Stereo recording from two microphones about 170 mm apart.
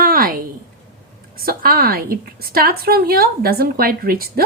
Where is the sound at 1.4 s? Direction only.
60° right (ahead or behind).